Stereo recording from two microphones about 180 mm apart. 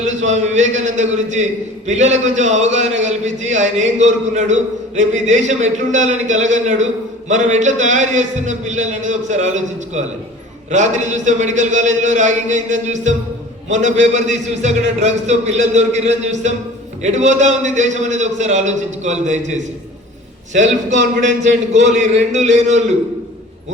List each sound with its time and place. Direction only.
0.0 s a man's voice: 40° right (ahead or behind)
20.5 s a man's voice: 40° right (ahead or behind)